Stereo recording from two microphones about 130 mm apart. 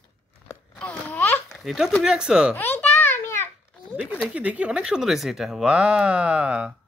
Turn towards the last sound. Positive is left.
turn(degrees=-5)  # may be behind; listen again after turning